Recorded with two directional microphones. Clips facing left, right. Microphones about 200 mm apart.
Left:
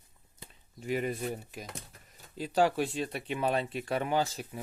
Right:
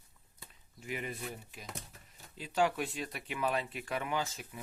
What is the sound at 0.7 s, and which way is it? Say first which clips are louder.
Speech: left 8 dB; 35° left (ahead or behind).